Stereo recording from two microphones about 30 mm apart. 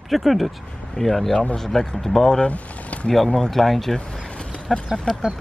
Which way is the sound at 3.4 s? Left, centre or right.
Centre.